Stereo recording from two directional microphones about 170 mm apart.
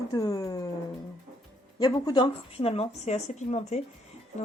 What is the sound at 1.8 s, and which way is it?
Speech, 25° left (ahead or behind).